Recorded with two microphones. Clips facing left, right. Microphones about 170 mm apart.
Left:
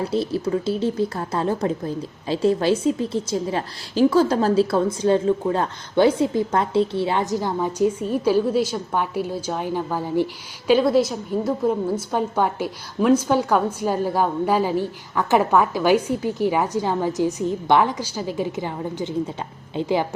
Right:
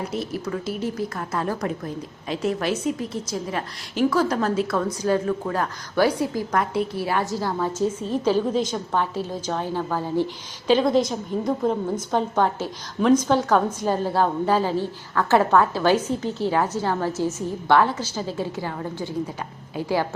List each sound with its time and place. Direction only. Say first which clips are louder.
0.0 s a woman's voice: left 5 dB; 30° left (ahead or behind)